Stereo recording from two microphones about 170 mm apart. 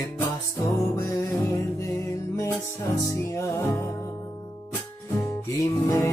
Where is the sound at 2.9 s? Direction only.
20° left (ahead or behind).